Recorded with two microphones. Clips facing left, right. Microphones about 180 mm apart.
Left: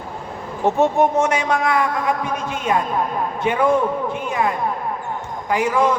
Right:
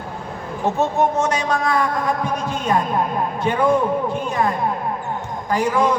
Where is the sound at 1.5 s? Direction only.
10° left (ahead or behind).